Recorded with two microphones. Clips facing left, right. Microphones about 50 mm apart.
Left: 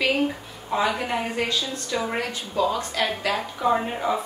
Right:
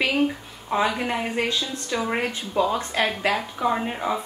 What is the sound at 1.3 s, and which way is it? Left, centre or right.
A woman's voice, right.